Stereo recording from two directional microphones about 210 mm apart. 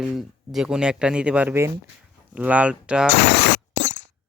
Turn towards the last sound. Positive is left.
turn(degrees=60)  # may be behind; listen again after turning